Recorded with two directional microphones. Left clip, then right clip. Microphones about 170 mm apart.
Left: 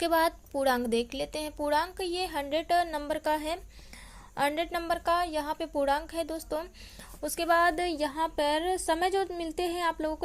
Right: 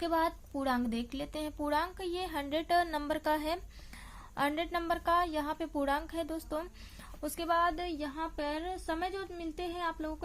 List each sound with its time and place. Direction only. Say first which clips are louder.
0.0 s a woman's voice: left 5 dB; 40° left (ahead or behind); by 3.6 s 10° left (ahead or behind)
4.4 s a woman's voice: left 4 dB; 25° left (ahead or behind); by 10.2 s 45° left (ahead or behind)